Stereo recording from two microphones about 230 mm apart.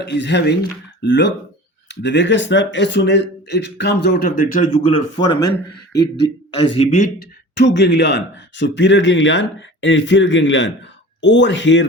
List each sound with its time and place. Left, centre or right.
0.0 s speech: left
6.7 s speech: left
7.2 s speech: left